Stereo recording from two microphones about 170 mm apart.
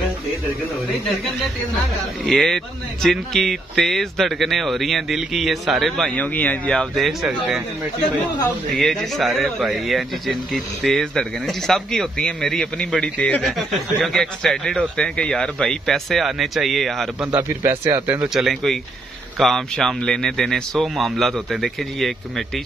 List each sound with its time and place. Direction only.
2.2 s speech: centre (ahead or behind)
8.7 s speech: centre (ahead or behind)
17.4 s speech: 15° right (ahead or behind)
18.3 s speech: centre (ahead or behind)